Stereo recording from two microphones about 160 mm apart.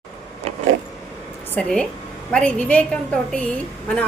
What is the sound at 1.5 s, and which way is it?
A woman's voice, 5° left (ahead or behind).